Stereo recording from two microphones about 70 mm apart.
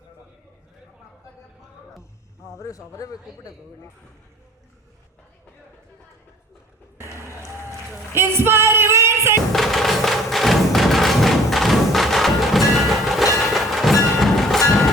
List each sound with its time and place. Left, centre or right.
2.0 s a sound: left
8.1 s music: right
9.5 s music: centre
13.4 s train: centre